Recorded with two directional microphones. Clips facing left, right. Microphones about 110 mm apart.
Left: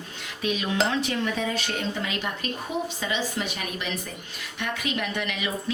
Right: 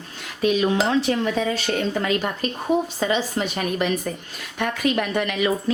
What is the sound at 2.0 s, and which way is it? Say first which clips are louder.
A woman's voice: right 7 dB; 45° right (ahead or behind).